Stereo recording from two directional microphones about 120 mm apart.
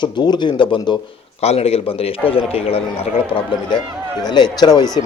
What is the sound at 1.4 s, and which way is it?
Speech, 60° left (ahead or behind).